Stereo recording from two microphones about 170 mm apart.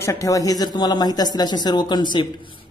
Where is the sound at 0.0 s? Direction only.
20° left (ahead or behind).